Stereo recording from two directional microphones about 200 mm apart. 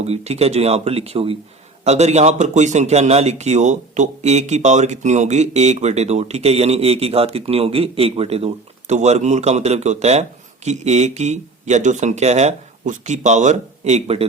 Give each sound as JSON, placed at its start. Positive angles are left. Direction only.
{"t": 0.0, "sound": "speech", "side_deg": -30}